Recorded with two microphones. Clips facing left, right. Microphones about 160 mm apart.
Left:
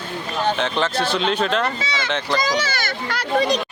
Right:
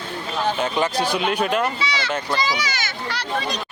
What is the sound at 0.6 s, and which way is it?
A man's voice, 10° right (ahead or behind).